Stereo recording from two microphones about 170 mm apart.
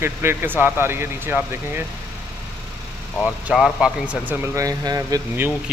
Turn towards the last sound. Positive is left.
turn(degrees=-15)  # may be behind; listen again after turning